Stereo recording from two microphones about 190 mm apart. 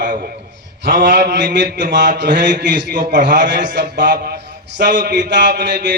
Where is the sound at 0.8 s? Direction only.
65° right (ahead or behind).